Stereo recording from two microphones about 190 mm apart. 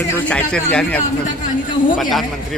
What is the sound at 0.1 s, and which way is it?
Speech, 5° left (ahead or behind).